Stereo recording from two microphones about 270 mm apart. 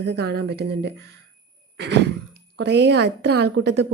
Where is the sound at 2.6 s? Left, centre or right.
Right.